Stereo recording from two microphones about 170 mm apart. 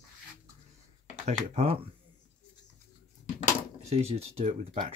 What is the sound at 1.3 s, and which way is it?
Speech, 40° right (ahead or behind).